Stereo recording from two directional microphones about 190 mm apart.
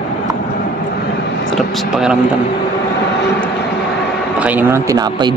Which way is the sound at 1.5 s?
Centre (ahead or behind).